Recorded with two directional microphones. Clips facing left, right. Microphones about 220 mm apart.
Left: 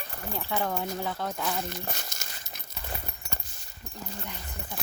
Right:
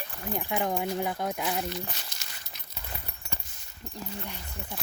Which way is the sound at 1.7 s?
45° left (ahead or behind).